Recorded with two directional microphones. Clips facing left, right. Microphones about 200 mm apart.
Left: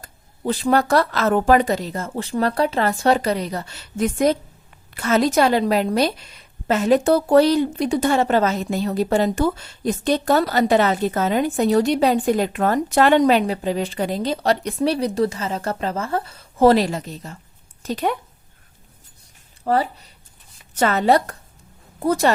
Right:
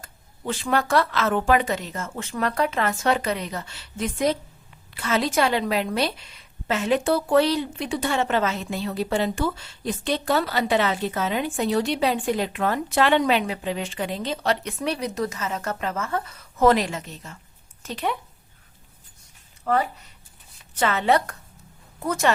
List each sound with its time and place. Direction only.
0.0 s a woman's voice: 35° left (ahead or behind)
19.6 s a woman's voice: 35° left (ahead or behind)